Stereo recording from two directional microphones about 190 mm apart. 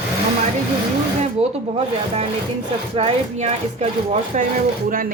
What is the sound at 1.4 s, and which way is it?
A woman's voice, 35° right (ahead or behind).